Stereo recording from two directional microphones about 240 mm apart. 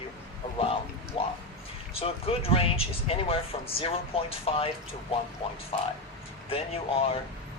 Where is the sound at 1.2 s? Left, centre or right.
Left.